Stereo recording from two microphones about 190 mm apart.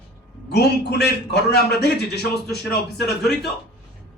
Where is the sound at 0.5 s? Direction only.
60° left (ahead or behind).